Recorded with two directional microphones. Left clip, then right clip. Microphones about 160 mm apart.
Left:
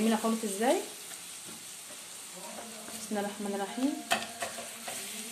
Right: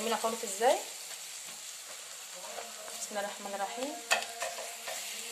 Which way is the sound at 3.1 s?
25° right (ahead or behind).